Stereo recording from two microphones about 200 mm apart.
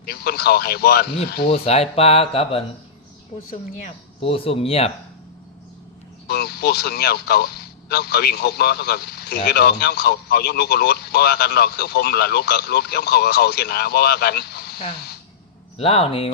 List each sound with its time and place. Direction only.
0.0 s a man's voice: 50° left (ahead or behind)
1.5 s speech: 30° left (ahead or behind)
3.7 s speech: 30° left (ahead or behind)
6.2 s a man's voice: 50° left (ahead or behind)
15.8 s speech: 30° left (ahead or behind)